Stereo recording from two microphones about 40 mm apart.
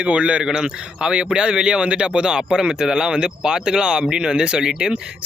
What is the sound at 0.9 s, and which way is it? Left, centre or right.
Speech, right.